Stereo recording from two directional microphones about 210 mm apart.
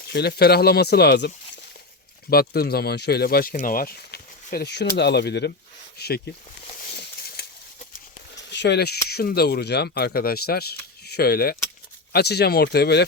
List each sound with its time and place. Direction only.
0.1 s speech: 50° left (ahead or behind)
2.3 s speech: 45° left (ahead or behind)
6.9 s a sound: 50° left (ahead or behind)
7.9 s speech: 55° left (ahead or behind)